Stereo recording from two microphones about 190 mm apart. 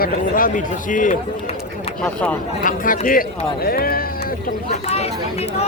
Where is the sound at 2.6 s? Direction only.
45° left (ahead or behind).